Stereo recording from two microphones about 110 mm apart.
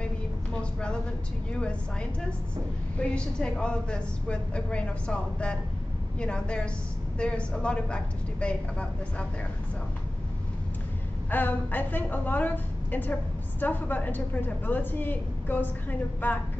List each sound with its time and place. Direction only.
0.0 s a sound: 10° left (ahead or behind)
3.0 s a woman's voice: 10° left (ahead or behind)
11.2 s a woman's voice: 15° left (ahead or behind)